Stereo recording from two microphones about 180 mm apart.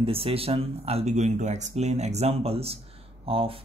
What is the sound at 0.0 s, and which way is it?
A man's voice, 30° right (ahead or behind).